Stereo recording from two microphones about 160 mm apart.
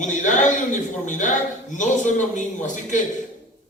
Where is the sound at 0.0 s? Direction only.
50° left (ahead or behind).